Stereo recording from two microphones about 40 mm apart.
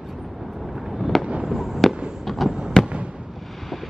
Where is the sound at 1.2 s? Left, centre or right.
Right.